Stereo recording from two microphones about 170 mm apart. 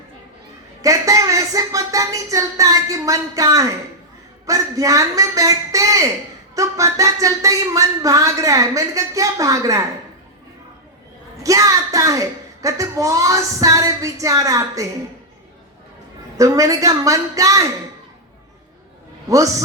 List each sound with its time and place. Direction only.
0.8 s speech: 20° right (ahead or behind)
11.4 s speech: 20° right (ahead or behind)
16.4 s speech: 20° right (ahead or behind)